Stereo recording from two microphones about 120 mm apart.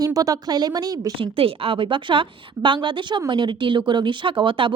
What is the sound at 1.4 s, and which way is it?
A woman's voice, 50° right (ahead or behind).